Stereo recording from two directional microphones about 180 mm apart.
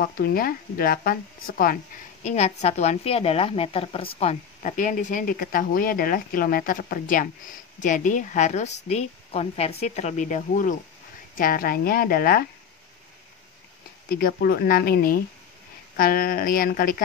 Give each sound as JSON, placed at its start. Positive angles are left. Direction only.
{"t": 0.0, "sound": "speech", "side_deg": 55}
{"t": 2.2, "sound": "a woman's voice", "side_deg": 35}
{"t": 14.0, "sound": "speech", "side_deg": 55}